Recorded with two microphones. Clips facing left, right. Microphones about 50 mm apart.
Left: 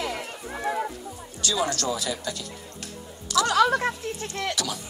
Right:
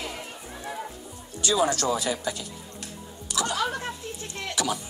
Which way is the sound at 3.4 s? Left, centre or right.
Left.